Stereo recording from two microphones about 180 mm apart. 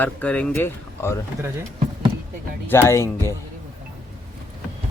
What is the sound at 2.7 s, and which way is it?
Speech, 15° left (ahead or behind).